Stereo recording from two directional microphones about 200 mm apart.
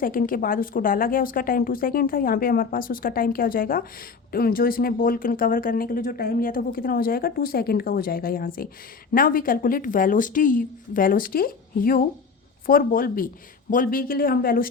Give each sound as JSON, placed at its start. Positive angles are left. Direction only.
{"t": 0.0, "sound": "speech", "side_deg": 45}